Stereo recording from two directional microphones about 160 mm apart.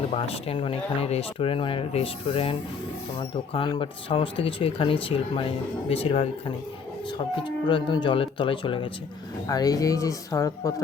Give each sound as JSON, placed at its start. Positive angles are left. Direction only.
{"t": 0.1, "sound": "speech", "side_deg": 40}
{"t": 7.4, "sound": "speech", "side_deg": 30}